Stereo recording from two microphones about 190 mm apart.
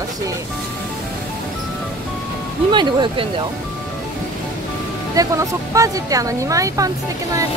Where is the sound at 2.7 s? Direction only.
25° right (ahead or behind).